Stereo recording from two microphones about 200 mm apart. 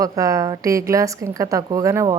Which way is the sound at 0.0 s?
15° right (ahead or behind).